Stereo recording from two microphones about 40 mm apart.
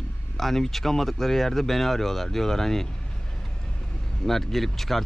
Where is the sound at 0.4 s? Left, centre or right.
Centre.